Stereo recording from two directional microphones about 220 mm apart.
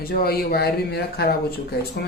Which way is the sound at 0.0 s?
45° left (ahead or behind).